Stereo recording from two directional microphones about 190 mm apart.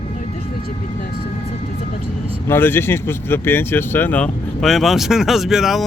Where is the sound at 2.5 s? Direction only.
10° left (ahead or behind).